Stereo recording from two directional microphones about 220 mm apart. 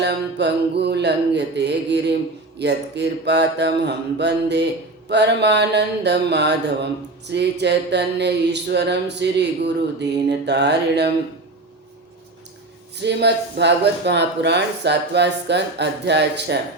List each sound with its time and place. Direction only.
0.0 s mantra: 50° right (ahead or behind)
13.0 s mantra: 50° right (ahead or behind)